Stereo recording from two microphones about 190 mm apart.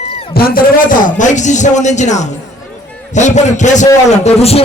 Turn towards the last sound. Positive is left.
turn(degrees=35)  # may be behind; listen again after turning